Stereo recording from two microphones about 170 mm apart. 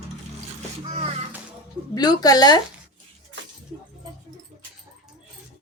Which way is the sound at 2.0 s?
25° left (ahead or behind).